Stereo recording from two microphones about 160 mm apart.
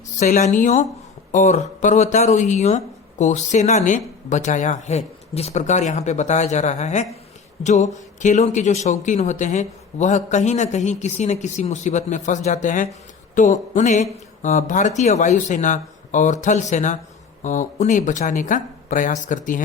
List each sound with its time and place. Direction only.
0.2 s speech: 45° left (ahead or behind)